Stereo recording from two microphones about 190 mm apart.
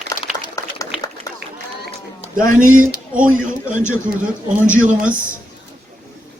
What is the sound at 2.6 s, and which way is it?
Speech, 45° right (ahead or behind).